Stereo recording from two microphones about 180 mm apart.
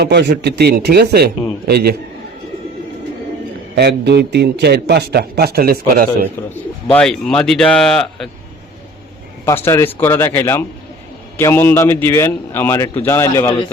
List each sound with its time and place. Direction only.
0.0 s a man's voice: 70° right (ahead or behind)
3.8 s a man's voice: 70° right (ahead or behind)
6.9 s speech: 5° left (ahead or behind)
9.5 s a man's voice: 15° left (ahead or behind)